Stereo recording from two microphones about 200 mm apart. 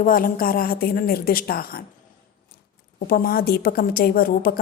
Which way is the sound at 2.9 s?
50° left (ahead or behind).